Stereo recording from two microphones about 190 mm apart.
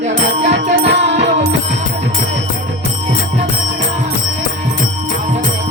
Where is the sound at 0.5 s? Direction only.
65° right (ahead or behind).